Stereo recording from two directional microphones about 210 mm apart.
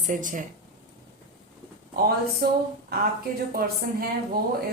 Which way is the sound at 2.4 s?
50° right (ahead or behind).